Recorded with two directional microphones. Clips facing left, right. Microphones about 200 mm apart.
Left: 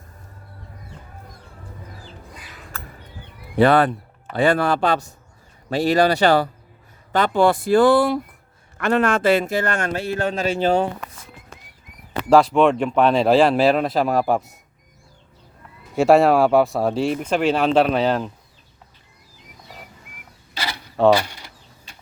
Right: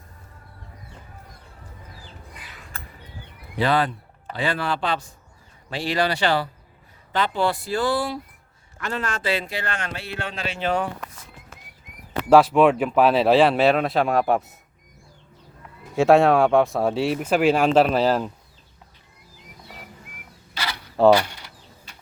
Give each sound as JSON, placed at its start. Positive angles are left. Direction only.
{"t": 3.5, "sound": "a man's voice", "side_deg": 55}
{"t": 12.3, "sound": "speech", "side_deg": -5}
{"t": 16.0, "sound": "speech", "side_deg": 0}
{"t": 21.0, "sound": "speech", "side_deg": 0}